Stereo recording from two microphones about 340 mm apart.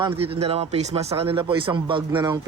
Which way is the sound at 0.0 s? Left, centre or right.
Centre.